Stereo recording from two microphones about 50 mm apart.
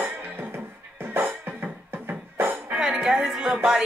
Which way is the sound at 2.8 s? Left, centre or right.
Centre.